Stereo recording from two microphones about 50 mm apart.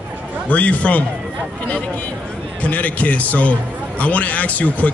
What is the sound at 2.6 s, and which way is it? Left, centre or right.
A man's voice, left.